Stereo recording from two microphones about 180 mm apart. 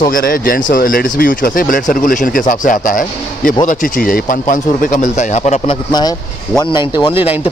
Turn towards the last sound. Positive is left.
turn(degrees=25)  # may be behind; listen again after turning